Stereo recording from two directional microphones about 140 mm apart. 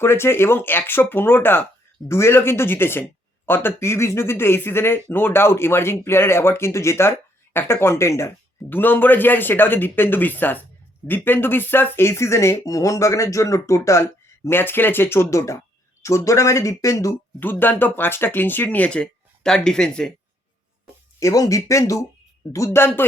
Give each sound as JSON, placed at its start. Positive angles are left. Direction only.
{"t": 0.0, "sound": "speech", "side_deg": 15}
{"t": 21.2, "sound": "speech", "side_deg": 25}